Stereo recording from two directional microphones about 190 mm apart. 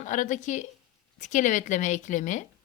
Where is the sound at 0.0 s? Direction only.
40° left (ahead or behind).